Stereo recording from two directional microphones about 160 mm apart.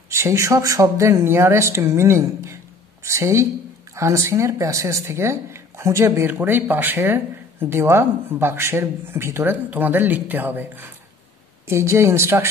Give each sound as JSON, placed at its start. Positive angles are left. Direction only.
{"t": 0.1, "sound": "a woman's voice", "side_deg": -20}